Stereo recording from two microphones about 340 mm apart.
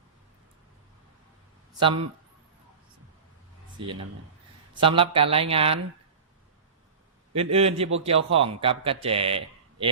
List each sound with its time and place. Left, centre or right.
1.8 s speech: centre
3.8 s speech: centre
7.3 s speech: centre